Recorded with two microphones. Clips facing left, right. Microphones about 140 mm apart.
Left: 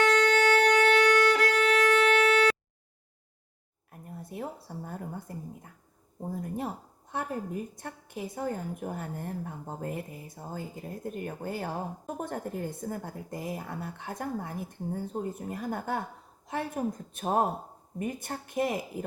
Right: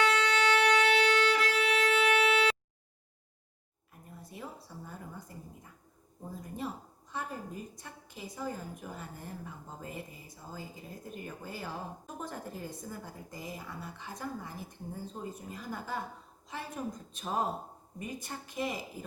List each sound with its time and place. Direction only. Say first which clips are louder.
0.0 s violin: left 5 dB; 50° left (ahead or behind)
3.9 s a sound: left 8 dB; 55° left (ahead or behind)
6.2 s a woman's voice: left 5 dB; 55° left (ahead or behind)